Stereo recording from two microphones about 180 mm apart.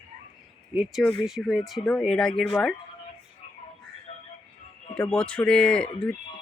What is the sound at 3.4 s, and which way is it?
Music, 35° left (ahead or behind).